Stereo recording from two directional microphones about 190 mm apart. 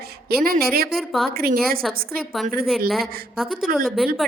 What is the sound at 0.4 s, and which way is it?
Speech, 50° right (ahead or behind).